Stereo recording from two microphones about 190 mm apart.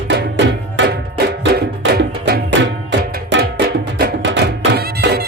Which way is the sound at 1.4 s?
65° right (ahead or behind).